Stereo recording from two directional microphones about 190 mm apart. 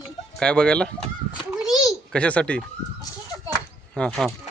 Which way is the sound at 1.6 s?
Centre (ahead or behind).